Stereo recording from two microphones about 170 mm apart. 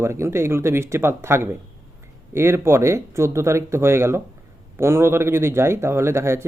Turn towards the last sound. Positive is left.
turn(degrees=-15)  # may be behind; listen again after turning